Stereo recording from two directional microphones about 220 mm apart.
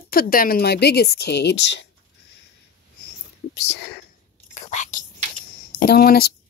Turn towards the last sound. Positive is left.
turn(degrees=45)  # may be behind; listen again after turning